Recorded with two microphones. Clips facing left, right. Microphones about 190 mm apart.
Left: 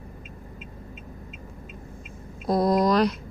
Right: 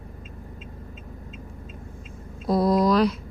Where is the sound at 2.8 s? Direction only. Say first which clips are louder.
Right 1 dB; 5° right (ahead or behind).